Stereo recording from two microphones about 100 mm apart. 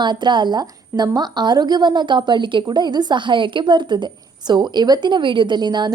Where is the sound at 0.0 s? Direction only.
50° right (ahead or behind).